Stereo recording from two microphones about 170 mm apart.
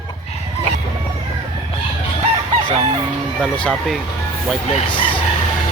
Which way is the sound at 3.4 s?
5° left (ahead or behind).